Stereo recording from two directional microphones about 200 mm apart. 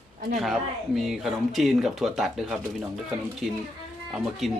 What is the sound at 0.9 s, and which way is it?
Speech, centre (ahead or behind).